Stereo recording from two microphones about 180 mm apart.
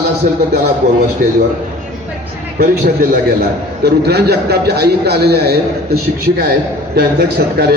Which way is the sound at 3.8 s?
60° right (ahead or behind).